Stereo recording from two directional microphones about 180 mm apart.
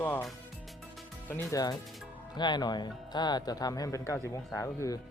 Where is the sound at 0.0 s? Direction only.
10° left (ahead or behind).